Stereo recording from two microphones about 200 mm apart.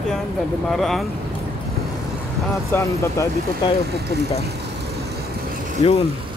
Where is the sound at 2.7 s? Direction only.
15° left (ahead or behind).